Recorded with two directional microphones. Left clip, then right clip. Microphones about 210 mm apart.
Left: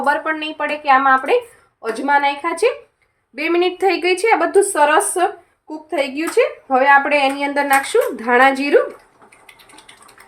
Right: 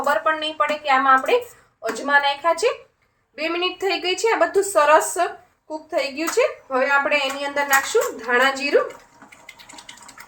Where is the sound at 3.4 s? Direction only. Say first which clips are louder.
Left 6 dB; 50° left (ahead or behind).